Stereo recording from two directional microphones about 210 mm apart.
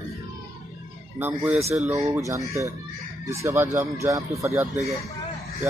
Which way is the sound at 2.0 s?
15° right (ahead or behind).